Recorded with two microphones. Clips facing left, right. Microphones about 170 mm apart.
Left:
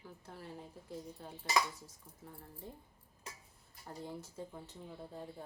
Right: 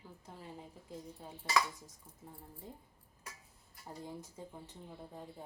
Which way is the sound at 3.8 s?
15° right (ahead or behind).